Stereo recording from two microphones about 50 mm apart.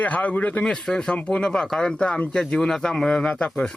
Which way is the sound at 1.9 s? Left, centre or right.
Left.